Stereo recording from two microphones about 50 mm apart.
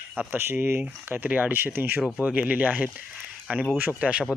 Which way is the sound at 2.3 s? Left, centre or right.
Right.